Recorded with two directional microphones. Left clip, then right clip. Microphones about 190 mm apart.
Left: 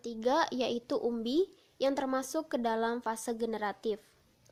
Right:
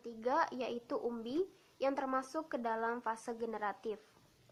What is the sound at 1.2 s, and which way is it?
Speech, 20° left (ahead or behind).